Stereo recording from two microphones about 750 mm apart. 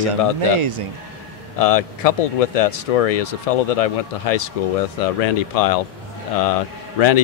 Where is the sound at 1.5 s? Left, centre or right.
Left.